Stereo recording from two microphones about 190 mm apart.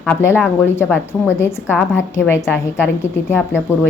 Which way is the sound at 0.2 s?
15° left (ahead or behind).